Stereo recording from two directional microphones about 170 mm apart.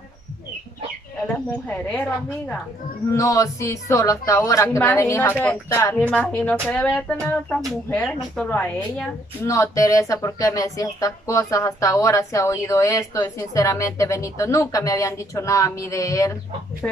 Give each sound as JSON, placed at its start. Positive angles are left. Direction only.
{"t": 1.2, "sound": "speech", "side_deg": 5}
{"t": 3.1, "sound": "speech", "side_deg": 20}